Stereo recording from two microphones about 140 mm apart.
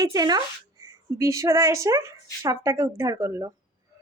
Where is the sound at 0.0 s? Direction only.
25° right (ahead or behind).